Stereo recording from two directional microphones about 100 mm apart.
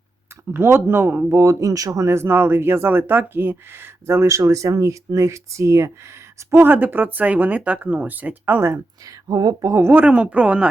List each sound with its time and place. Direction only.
0.5 s speech: 25° right (ahead or behind)
8.7 s speech: 40° right (ahead or behind); by 10.7 s 15° right (ahead or behind)